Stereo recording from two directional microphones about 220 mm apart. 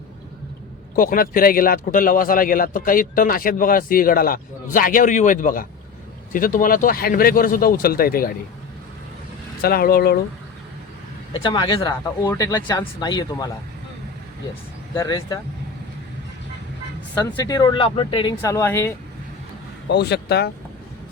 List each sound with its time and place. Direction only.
0.9 s a man's voice: 40° left (ahead or behind)
9.6 s speech: 45° left (ahead or behind)
11.4 s speech: 20° left (ahead or behind)
14.9 s speech: 15° left (ahead or behind)
17.2 s speech: 15° left (ahead or behind)
19.9 s speech: 50° left (ahead or behind)